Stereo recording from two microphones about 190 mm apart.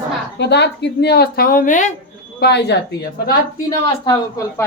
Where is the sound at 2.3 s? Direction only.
60° left (ahead or behind).